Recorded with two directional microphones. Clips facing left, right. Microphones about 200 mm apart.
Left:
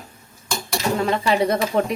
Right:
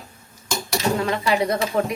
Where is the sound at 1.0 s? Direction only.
30° left (ahead or behind).